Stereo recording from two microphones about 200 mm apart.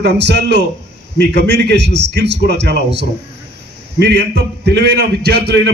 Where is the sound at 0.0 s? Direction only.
60° right (ahead or behind).